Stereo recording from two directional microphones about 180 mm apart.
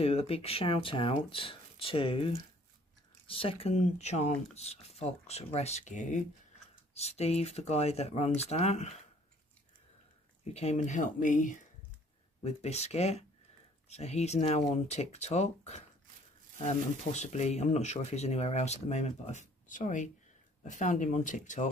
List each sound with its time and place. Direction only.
0.0 s speech: 35° left (ahead or behind)
10.4 s speech: 35° left (ahead or behind)